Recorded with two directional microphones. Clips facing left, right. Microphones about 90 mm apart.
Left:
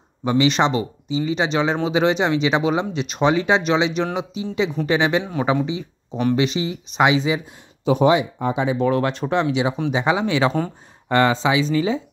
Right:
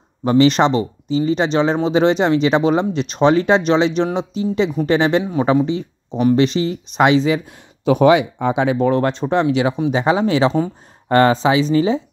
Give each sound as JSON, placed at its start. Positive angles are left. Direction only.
{"t": 0.2, "sound": "speech", "side_deg": -40}
{"t": 6.3, "sound": "speech", "side_deg": -40}
{"t": 7.8, "sound": "speech", "side_deg": -65}
{"t": 8.7, "sound": "speech", "side_deg": -35}
{"t": 9.9, "sound": "speech", "side_deg": -35}